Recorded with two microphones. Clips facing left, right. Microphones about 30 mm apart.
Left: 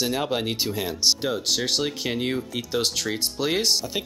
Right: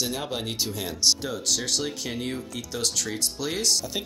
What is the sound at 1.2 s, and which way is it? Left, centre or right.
Speech, left.